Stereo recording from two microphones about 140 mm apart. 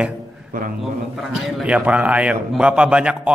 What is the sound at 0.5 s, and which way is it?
Speech, 90° right.